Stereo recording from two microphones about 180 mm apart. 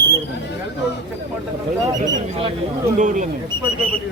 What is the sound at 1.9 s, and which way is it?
Speech, 20° right (ahead or behind).